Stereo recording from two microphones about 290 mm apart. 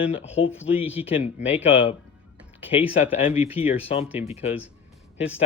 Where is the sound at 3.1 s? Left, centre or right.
Centre.